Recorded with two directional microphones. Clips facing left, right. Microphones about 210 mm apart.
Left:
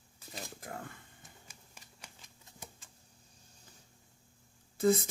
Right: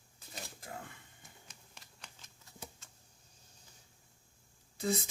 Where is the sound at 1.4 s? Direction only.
10° left (ahead or behind).